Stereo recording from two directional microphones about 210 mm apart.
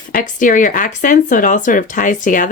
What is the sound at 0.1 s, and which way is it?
Speech, 40° left (ahead or behind).